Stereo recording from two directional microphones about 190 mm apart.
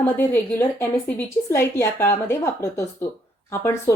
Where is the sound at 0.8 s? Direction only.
15° left (ahead or behind).